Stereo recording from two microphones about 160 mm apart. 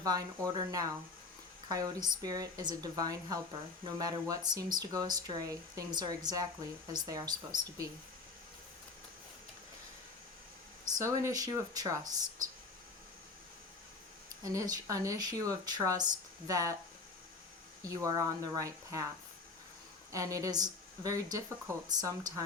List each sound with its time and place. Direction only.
0.0 s speech: 25° right (ahead or behind)
10.9 s speech: 20° right (ahead or behind)
14.4 s speech: 20° right (ahead or behind)
17.8 s speech: 20° right (ahead or behind)
20.1 s speech: 20° right (ahead or behind)